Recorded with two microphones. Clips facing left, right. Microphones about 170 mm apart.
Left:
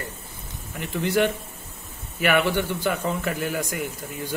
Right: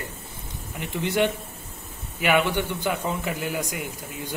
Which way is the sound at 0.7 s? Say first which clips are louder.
Left 1 dB; 20° right (ahead or behind).